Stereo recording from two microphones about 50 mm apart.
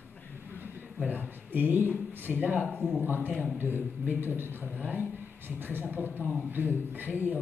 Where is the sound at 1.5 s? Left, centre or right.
Right.